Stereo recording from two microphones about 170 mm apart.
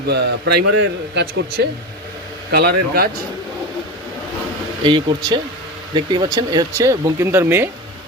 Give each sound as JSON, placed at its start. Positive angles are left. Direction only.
{"t": 0.1, "sound": "a man's voice", "side_deg": -75}
{"t": 2.5, "sound": "speech", "side_deg": -65}
{"t": 4.8, "sound": "speech", "side_deg": -30}